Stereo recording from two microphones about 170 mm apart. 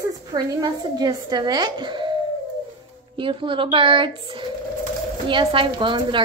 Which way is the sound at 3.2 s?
30° right (ahead or behind).